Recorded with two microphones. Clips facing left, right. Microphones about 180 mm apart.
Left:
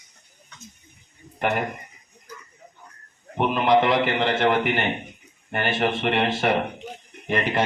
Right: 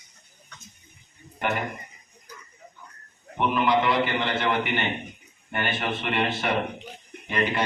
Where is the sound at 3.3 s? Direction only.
35° left (ahead or behind).